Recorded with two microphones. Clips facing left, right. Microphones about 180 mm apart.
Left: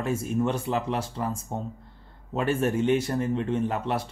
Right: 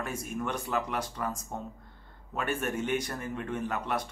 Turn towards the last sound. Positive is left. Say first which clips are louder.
# left 5 dB
turn(degrees=30)  # may be behind; listen again after turning